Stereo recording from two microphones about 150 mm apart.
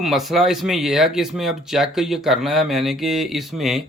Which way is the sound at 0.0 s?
Centre (ahead or behind).